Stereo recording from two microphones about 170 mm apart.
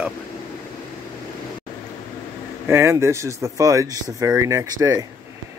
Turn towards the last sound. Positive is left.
turn(degrees=-20)  # may be behind; listen again after turning